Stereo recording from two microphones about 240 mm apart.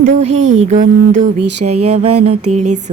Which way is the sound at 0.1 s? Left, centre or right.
Right.